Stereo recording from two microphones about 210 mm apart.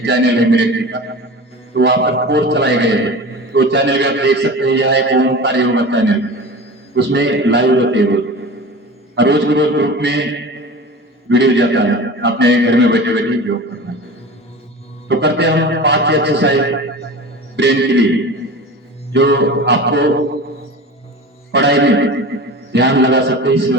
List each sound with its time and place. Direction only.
0.0 s a man's voice: 55° right (ahead or behind)
11.3 s a man's voice: 55° right (ahead or behind)
15.0 s a man's voice: 55° right (ahead or behind)
19.1 s a man's voice: 55° right (ahead or behind)
21.5 s a man's voice: 55° right (ahead or behind)